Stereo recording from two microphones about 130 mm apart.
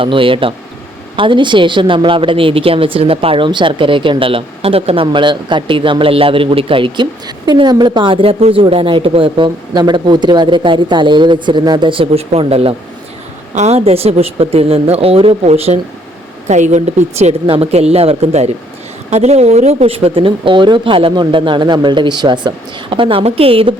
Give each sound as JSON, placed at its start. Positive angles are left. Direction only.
{"t": 0.0, "sound": "speech", "side_deg": -40}
{"t": 13.5, "sound": "speech", "side_deg": -60}
{"t": 16.5, "sound": "speech", "side_deg": -65}